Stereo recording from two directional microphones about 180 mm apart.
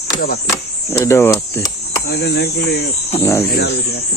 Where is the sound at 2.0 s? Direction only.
65° left (ahead or behind).